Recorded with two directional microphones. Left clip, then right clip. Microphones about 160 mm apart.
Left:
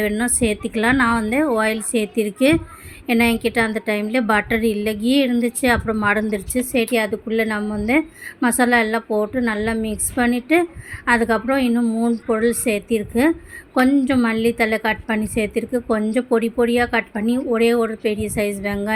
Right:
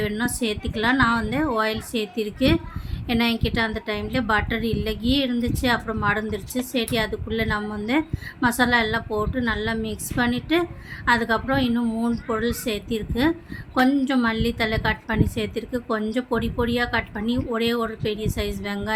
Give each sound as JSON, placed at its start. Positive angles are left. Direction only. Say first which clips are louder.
{"t": 0.0, "sound": "a woman's voice", "louder": "left 5 dB", "side_deg": 25}